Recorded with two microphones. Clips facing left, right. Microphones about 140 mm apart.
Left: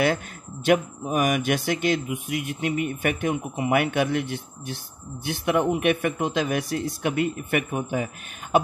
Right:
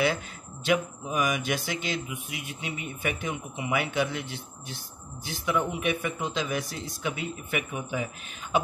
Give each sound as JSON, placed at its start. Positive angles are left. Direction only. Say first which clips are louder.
{"t": 0.7, "sound": "speech", "louder": "left 5 dB", "side_deg": 55}